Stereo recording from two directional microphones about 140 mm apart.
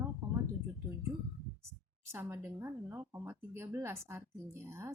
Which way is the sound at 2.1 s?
15° right (ahead or behind).